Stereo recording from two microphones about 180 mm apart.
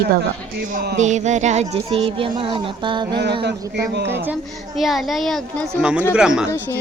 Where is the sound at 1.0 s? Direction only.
40° right (ahead or behind).